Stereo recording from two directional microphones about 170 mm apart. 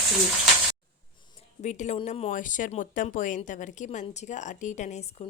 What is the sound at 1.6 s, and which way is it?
Speech, 45° left (ahead or behind).